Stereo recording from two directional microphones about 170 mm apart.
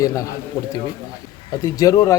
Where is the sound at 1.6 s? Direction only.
20° left (ahead or behind).